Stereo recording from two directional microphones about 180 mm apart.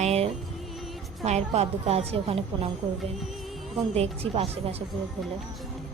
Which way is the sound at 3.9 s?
35° right (ahead or behind).